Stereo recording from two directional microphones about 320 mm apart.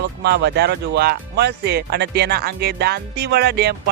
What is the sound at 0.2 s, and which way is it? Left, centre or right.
Speech, right.